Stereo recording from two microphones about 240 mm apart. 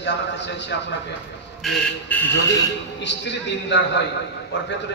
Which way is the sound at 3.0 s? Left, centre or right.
Left.